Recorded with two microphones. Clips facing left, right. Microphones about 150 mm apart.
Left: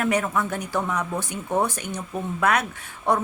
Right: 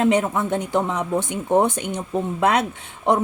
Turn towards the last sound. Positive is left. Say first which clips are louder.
# right 3 dB
turn(degrees=-20)  # may be behind; listen again after turning